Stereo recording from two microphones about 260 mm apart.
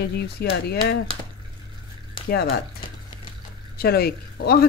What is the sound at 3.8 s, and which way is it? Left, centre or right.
Speech, left.